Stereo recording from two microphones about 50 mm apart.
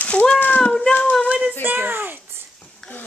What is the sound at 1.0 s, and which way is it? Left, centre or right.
Child singing, centre.